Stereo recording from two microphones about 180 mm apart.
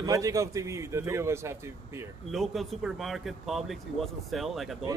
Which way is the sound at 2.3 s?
Centre (ahead or behind).